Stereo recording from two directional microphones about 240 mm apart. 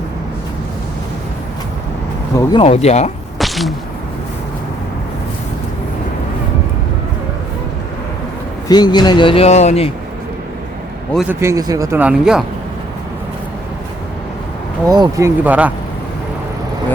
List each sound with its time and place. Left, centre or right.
2.3 s speech: centre
3.3 s sneeze: centre
8.6 s speech: centre
11.1 s speech: centre
14.8 s speech: centre